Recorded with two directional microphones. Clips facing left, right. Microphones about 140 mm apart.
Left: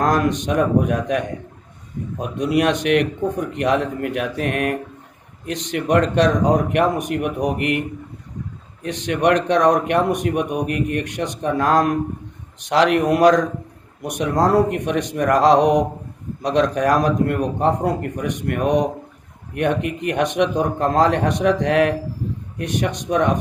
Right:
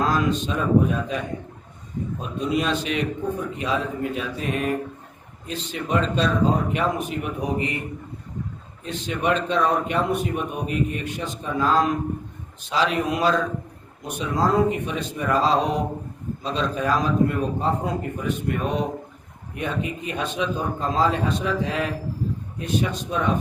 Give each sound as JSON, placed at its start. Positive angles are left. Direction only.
{"t": 0.1, "sound": "a man's voice", "side_deg": 70}